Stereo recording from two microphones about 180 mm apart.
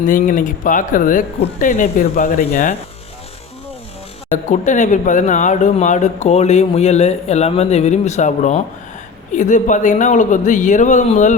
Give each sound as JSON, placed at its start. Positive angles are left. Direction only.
{"t": 0.0, "sound": "speech", "side_deg": 45}
{"t": 4.4, "sound": "speech", "side_deg": 45}